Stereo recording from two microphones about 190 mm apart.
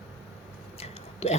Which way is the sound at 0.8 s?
35° left (ahead or behind).